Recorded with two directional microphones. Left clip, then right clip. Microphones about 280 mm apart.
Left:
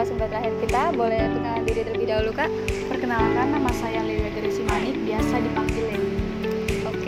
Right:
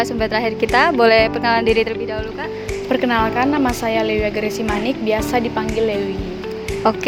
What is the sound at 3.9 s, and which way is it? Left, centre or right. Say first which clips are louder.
Speech: right 8 dB; right.